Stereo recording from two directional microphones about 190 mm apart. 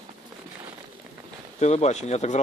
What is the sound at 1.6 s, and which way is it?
Speech, 35° left (ahead or behind).